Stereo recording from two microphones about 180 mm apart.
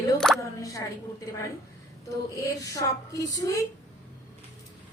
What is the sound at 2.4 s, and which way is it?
A woman's voice, 20° left (ahead or behind).